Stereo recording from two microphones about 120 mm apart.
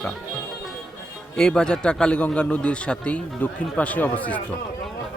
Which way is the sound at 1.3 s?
5° left (ahead or behind).